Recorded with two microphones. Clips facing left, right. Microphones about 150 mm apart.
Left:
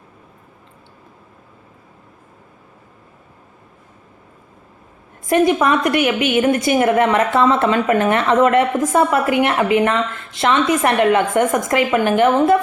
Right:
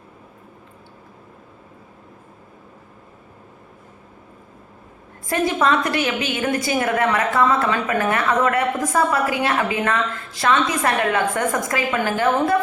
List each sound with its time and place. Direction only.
5.2 s a woman's voice: 20° left (ahead or behind)